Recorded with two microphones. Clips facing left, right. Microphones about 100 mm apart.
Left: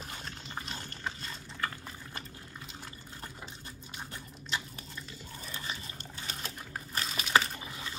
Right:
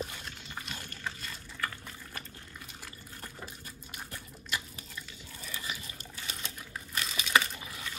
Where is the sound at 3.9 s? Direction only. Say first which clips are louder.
Left 1 dB; 25° left (ahead or behind).